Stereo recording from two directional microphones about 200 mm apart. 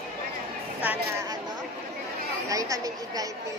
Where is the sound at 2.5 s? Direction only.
15° right (ahead or behind).